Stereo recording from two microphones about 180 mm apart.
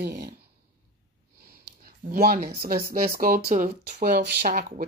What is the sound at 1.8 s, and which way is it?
Speech, 55° right (ahead or behind).